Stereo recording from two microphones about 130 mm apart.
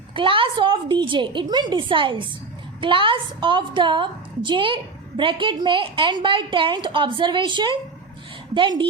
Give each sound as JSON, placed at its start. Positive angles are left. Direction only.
{"t": 0.1, "sound": "a woman's voice", "side_deg": -40}